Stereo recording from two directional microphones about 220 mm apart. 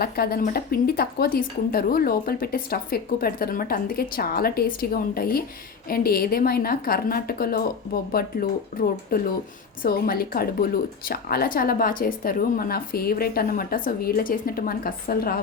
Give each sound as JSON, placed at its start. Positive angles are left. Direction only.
{"t": 0.0, "sound": "a woman's voice", "side_deg": 45}